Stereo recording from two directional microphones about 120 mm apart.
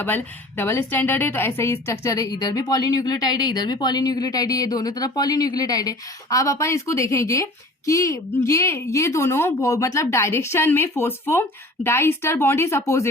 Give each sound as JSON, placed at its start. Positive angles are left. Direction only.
{"t": 0.0, "sound": "a woman's voice", "side_deg": 15}